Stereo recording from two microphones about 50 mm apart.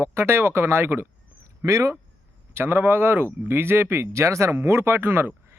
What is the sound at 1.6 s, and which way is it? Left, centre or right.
Speech, right.